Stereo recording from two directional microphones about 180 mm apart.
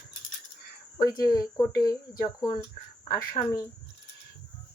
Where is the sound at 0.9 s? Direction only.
20° left (ahead or behind).